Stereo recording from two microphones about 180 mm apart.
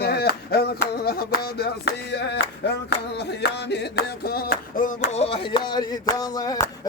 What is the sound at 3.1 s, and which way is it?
Music, 65° left (ahead or behind).